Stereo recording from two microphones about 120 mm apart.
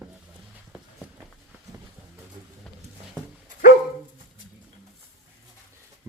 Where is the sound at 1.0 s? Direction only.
10° right (ahead or behind).